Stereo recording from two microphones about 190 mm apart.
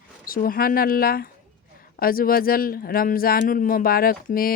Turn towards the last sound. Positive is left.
turn(degrees=50)  # may be behind; listen again after turning